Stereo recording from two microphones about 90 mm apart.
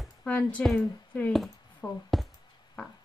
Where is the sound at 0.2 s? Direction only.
15° left (ahead or behind).